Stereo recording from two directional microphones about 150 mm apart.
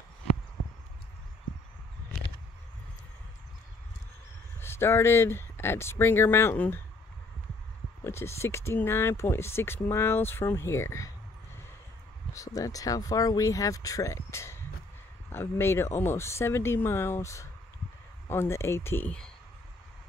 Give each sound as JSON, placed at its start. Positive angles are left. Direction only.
{"t": 4.6, "sound": "speech", "side_deg": 15}
{"t": 8.0, "sound": "speech", "side_deg": 15}
{"t": 12.4, "sound": "speech", "side_deg": 20}